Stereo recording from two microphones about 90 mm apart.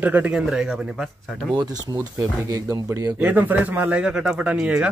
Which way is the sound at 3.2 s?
20° right (ahead or behind).